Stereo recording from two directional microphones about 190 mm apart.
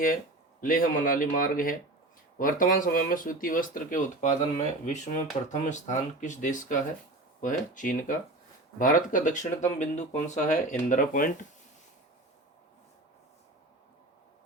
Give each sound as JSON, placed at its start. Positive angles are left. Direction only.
{"t": 0.6, "sound": "speech", "side_deg": 45}